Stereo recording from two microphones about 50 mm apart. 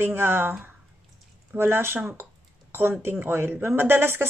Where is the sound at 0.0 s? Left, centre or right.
Right.